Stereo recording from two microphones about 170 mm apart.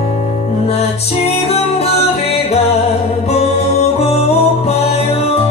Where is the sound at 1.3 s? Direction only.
40° left (ahead or behind).